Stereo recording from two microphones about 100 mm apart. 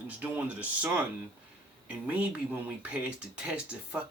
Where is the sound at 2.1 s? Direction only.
15° right (ahead or behind).